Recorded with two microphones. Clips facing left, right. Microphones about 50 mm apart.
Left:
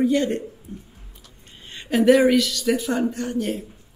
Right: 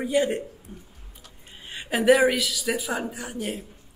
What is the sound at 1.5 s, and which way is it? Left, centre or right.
Speech, centre.